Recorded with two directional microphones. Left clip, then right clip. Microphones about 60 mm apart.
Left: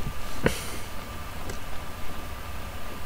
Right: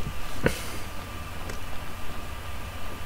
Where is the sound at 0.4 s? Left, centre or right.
Left.